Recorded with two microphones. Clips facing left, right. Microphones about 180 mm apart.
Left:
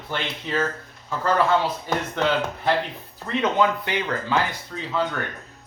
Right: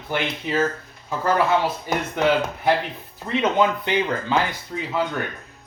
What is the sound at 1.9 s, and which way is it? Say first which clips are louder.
Speech: right 3 dB; 10° right (ahead or behind).